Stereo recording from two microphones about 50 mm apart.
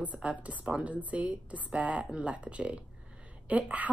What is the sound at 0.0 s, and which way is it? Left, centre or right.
A woman's voice, right.